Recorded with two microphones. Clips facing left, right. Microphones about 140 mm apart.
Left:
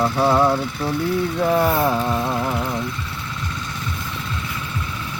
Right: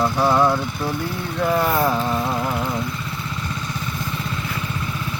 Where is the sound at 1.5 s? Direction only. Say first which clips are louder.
Even; 10° left (ahead or behind).